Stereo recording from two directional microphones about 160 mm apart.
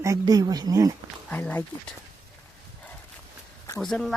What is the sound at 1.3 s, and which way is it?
Speech, 10° left (ahead or behind).